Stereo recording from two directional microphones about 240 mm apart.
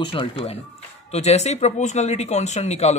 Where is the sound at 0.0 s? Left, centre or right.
Centre.